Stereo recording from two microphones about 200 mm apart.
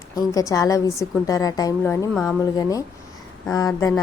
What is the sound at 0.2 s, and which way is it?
Speech, 15° left (ahead or behind).